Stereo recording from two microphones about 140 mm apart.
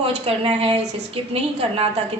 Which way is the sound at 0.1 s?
45° right (ahead or behind).